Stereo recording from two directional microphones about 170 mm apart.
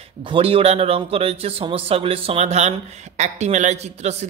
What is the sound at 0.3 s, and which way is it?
Speech, 35° right (ahead or behind).